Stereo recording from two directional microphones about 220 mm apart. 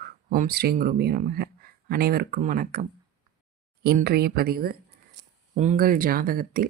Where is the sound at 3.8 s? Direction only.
45° right (ahead or behind).